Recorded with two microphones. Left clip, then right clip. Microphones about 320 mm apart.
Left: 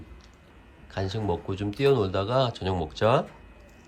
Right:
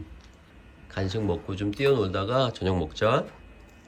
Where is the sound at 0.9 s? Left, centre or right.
Centre.